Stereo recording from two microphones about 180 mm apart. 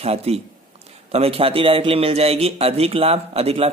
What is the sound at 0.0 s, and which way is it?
Speech, 35° right (ahead or behind).